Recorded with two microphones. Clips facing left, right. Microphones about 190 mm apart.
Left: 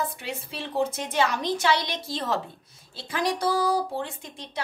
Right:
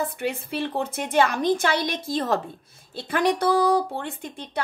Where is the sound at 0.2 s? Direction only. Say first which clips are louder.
Right 8 dB; 55° right (ahead or behind).